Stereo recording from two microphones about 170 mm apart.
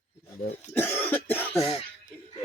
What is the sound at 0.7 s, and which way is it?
Cough, 15° left (ahead or behind).